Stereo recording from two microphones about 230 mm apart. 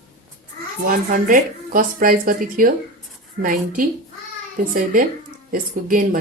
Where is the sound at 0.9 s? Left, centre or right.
Right.